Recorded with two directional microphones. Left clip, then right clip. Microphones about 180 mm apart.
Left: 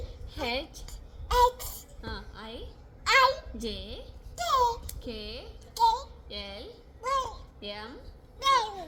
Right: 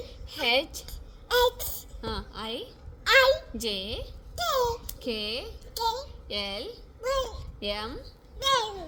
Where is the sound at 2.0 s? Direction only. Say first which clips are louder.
Right 7 dB; 55° right (ahead or behind).